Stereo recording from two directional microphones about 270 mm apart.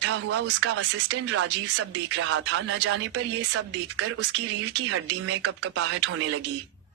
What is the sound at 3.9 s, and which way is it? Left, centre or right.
Speech, right.